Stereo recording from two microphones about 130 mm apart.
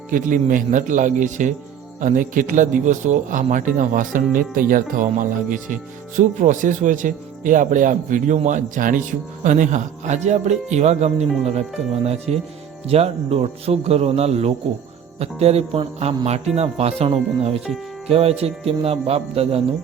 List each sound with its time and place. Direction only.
0.1 s speech: 90° right; by 1.5 s 75° right (ahead or behind)
2.0 s a man's voice: 90° right; by 19.6 s 50° right (ahead or behind)